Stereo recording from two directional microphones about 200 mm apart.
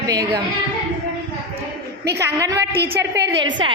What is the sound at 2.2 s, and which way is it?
Speech, 15° right (ahead or behind).